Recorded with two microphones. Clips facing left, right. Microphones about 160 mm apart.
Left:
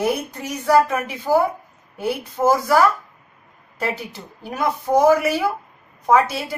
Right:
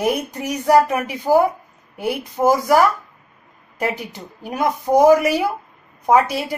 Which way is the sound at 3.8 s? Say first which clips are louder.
Right 2 dB; 15° right (ahead or behind).